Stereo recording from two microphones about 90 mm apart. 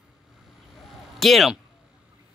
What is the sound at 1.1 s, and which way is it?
Speech, centre (ahead or behind).